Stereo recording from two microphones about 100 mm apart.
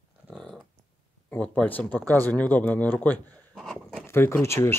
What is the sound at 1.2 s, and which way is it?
Speech, 10° left (ahead or behind).